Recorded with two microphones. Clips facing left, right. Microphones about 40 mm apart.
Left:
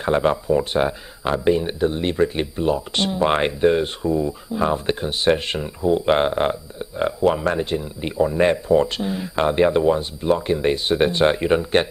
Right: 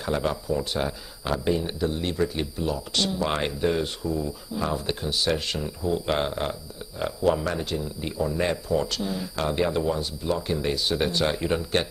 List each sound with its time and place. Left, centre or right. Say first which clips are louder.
0.0 s speech: left 8 dB; left